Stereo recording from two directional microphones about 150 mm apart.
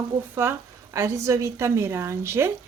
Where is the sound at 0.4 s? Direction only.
15° right (ahead or behind).